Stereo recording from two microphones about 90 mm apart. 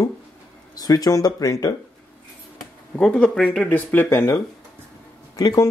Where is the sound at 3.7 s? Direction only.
20° left (ahead or behind).